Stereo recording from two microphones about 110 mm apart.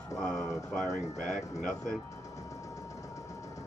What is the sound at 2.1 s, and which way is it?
Music, 30° left (ahead or behind).